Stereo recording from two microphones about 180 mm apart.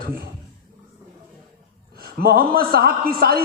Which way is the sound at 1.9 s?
60° right (ahead or behind).